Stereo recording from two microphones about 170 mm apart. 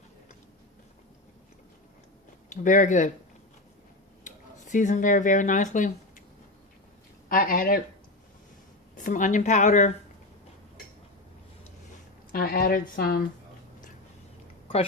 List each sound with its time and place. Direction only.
2.5 s a woman's voice: 45° left (ahead or behind)
4.2 s speech: 45° left (ahead or behind)
7.3 s speech: 55° left (ahead or behind)
9.0 s a woman's voice: 50° left (ahead or behind)
12.3 s speech: 60° left (ahead or behind)